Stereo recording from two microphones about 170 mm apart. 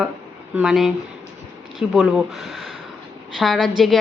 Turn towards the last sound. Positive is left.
turn(degrees=0)  # may be behind; listen again after turning